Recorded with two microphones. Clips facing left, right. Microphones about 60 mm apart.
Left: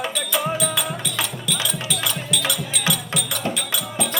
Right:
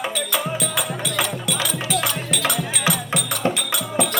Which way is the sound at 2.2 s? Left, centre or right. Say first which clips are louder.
Right 2 dB; right.